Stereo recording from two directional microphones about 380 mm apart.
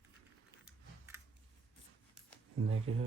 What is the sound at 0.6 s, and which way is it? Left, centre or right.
Typing, centre.